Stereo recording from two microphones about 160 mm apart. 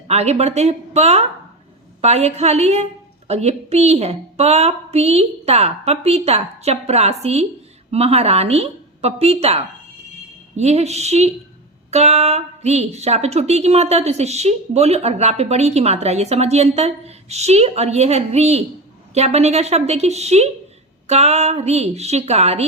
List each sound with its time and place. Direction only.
0.1 s a woman's voice: 40° right (ahead or behind)